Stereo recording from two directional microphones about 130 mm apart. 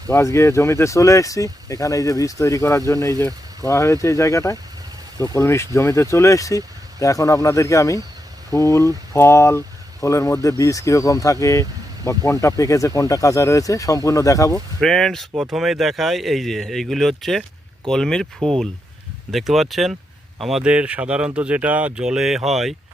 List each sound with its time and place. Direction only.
0.1 s speech: 20° left (ahead or behind)
14.5 s speech: 5° left (ahead or behind)
19.3 s speech: centre (ahead or behind)